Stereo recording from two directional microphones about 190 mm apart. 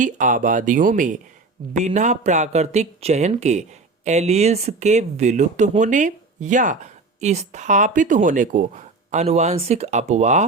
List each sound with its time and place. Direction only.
0.0 s speech: 45° right (ahead or behind)